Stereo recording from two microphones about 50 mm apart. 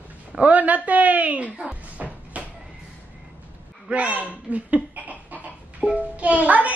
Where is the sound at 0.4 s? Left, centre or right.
Right.